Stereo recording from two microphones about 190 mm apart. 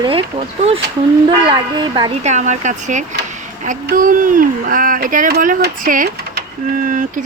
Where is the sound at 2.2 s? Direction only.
40° right (ahead or behind).